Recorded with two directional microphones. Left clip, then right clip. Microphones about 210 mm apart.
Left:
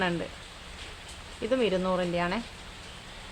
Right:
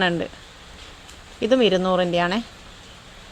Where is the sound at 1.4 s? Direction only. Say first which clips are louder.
Right 9 dB; 35° right (ahead or behind).